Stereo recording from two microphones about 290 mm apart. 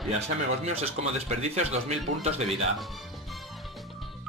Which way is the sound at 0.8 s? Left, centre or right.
Right.